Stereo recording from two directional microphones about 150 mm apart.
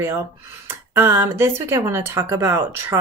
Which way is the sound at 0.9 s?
15° right (ahead or behind).